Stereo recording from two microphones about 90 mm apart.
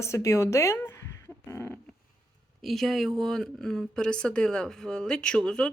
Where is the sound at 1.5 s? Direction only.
25° left (ahead or behind).